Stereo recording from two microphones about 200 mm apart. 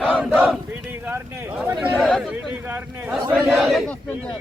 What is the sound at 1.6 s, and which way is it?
Chatter, 10° right (ahead or behind).